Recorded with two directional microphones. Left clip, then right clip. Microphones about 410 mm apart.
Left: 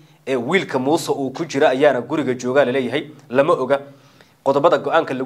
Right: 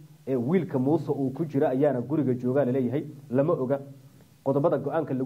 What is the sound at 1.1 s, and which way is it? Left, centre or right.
Speech, centre.